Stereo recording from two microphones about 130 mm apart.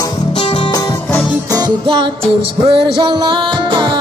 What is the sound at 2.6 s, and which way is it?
Music, 40° right (ahead or behind).